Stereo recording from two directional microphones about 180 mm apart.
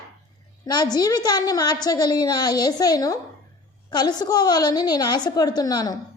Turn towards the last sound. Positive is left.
turn(degrees=20)  # may be behind; listen again after turning